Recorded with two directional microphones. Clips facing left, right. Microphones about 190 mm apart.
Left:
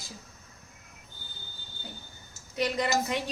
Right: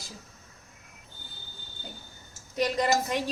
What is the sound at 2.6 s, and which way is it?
Speech, 45° right (ahead or behind).